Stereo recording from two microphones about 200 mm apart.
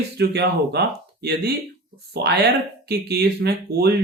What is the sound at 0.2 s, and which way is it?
Speech, 55° right (ahead or behind).